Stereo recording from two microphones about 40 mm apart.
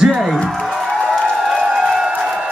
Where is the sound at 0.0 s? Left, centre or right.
Centre.